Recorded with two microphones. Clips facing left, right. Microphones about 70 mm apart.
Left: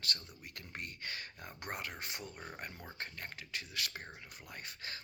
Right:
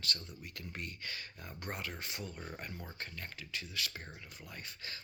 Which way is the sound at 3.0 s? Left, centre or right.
Left.